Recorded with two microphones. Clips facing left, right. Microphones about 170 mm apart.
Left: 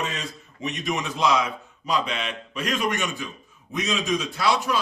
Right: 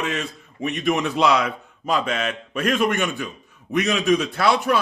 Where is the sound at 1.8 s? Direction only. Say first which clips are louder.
Right 4 dB; 50° right (ahead or behind).